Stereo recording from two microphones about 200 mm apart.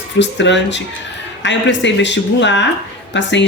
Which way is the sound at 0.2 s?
65° left (ahead or behind).